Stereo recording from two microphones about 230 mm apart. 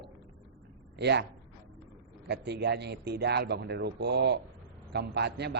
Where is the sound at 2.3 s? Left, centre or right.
Right.